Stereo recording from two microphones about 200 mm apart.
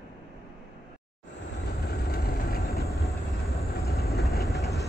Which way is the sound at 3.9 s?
50° left (ahead or behind).